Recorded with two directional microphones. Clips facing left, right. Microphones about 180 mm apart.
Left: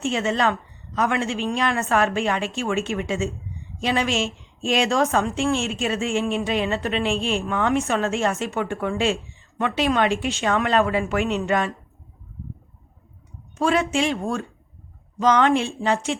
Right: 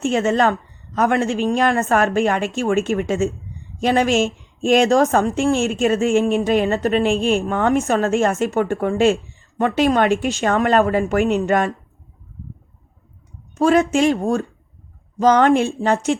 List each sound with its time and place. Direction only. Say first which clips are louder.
0.0 s a woman's voice: right 5 dB; 45° right (ahead or behind)
13.6 s a woman's voice: right 6 dB; 45° right (ahead or behind)